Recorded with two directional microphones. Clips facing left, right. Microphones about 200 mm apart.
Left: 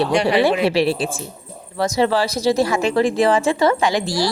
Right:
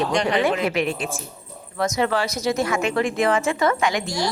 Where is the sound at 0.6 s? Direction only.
30° left (ahead or behind).